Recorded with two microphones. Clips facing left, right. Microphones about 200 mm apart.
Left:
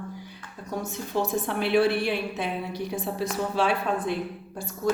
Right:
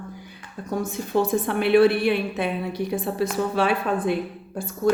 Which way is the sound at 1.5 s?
60° right (ahead or behind).